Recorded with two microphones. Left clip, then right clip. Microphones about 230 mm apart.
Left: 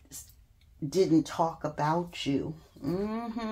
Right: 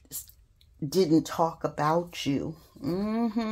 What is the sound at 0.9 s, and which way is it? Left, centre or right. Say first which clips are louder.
Speech: right 1 dB; right.